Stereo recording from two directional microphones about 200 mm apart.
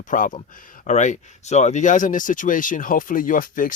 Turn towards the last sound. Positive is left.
turn(degrees=45)  # may be behind; listen again after turning